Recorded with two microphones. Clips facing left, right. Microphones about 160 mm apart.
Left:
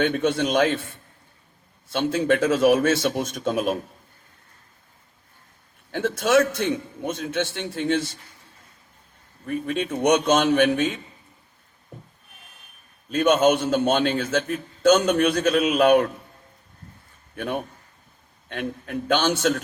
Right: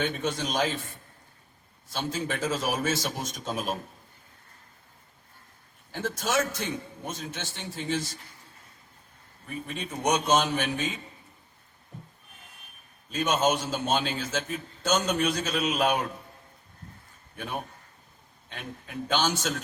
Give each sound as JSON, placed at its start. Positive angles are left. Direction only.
{"t": 0.0, "sound": "a man's voice", "side_deg": 65}
{"t": 1.9, "sound": "a man's voice", "side_deg": 60}
{"t": 6.1, "sound": "a man's voice", "side_deg": 60}
{"t": 9.5, "sound": "a man's voice", "side_deg": 75}
{"t": 13.1, "sound": "a man's voice", "side_deg": 60}
{"t": 18.4, "sound": "a man's voice", "side_deg": 60}